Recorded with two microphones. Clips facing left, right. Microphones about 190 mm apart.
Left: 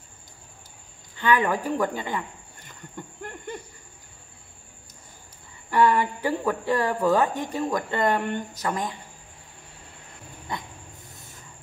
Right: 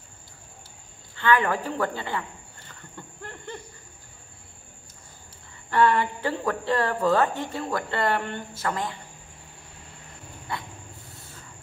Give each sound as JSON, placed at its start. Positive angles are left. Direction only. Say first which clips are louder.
{"t": 1.1, "sound": "snake", "louder": "even", "side_deg": 15}
{"t": 5.7, "sound": "speech", "louder": "left 1 dB", "side_deg": 10}
{"t": 10.5, "sound": "speech", "louder": "even", "side_deg": 15}
{"t": 11.1, "sound": "train", "louder": "right 1 dB", "side_deg": 15}